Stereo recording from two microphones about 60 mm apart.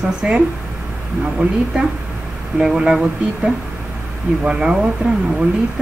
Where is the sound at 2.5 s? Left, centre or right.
Centre.